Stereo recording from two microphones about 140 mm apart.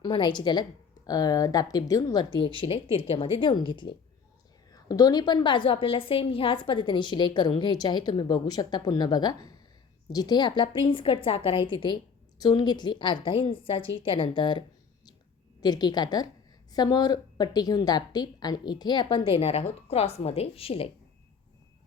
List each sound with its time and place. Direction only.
0.0 s a woman's voice: 35° left (ahead or behind)
15.6 s a woman's voice: 30° left (ahead or behind)